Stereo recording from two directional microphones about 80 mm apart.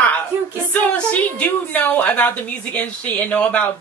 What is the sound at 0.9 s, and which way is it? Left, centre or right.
A woman's voice, centre.